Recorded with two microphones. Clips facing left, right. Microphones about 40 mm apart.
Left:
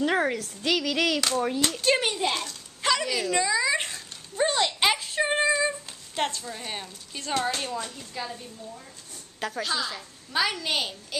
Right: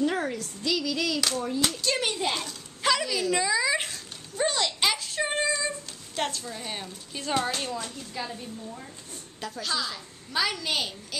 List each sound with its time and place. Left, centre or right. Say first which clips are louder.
0.0 s a child's voice: left 3 dB; left
0.7 s a sound: left 3 dB; left
1.7 s a child's voice: left 4 dB; left
2.0 s a child's voice: left 2 dB; centre
6.1 s a woman's voice: left 2 dB; centre
9.6 s a woman's voice: even; centre